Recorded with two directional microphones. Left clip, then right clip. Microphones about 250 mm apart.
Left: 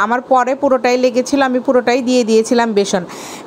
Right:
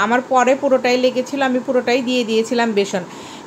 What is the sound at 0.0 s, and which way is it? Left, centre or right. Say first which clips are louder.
A woman's voice: left 2 dB; left.